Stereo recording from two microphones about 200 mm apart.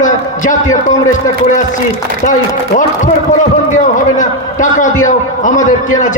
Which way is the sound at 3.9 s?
40° left (ahead or behind).